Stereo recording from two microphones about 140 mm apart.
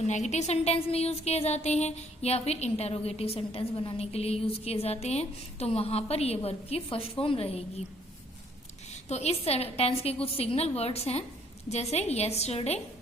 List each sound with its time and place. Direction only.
0.1 s a woman's voice: 55° left (ahead or behind)
8.9 s a woman's voice: 50° left (ahead or behind)